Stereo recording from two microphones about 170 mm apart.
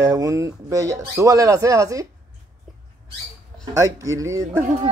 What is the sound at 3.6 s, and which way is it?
Speech, 20° right (ahead or behind).